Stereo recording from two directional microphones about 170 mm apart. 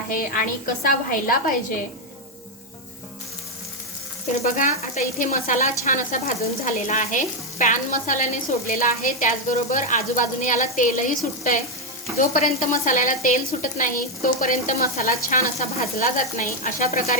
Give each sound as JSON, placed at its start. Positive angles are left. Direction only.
{"t": 0.1, "sound": "a woman's voice", "side_deg": 55}
{"t": 4.4, "sound": "frying", "side_deg": 50}
{"t": 12.7, "sound": "frying", "side_deg": 50}
{"t": 16.0, "sound": "frying", "side_deg": 50}